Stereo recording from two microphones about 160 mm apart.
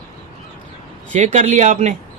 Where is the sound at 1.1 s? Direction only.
50° right (ahead or behind).